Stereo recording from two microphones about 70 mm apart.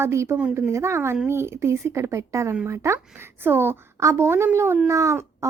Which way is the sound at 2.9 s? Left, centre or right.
Right.